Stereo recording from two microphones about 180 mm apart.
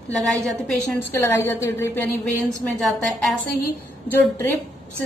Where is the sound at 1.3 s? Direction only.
15° left (ahead or behind).